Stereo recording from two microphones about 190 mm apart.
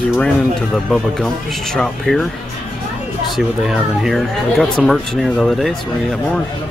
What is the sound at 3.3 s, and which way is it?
Speech, centre (ahead or behind).